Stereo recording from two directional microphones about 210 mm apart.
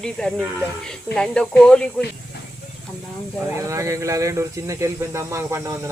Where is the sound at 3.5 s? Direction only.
15° right (ahead or behind).